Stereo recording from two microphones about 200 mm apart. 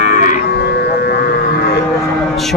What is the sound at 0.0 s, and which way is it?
Cattle, 40° left (ahead or behind).